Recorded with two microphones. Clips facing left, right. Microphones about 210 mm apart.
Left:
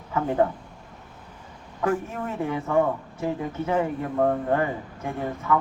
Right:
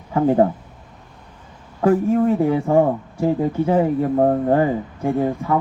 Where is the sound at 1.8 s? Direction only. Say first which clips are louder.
Right 10 dB; 35° right (ahead or behind).